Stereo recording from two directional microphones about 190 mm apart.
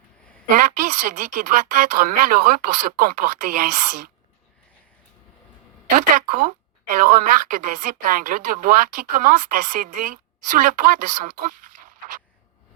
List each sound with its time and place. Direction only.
0.5 s a woman's voice: 45° right (ahead or behind)
6.1 s a woman's voice: 45° right (ahead or behind)